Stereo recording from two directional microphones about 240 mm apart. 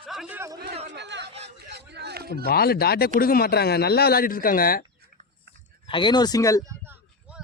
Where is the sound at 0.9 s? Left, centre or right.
Right.